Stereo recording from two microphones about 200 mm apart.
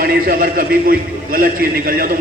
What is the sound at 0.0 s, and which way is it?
A man's voice, 45° right (ahead or behind).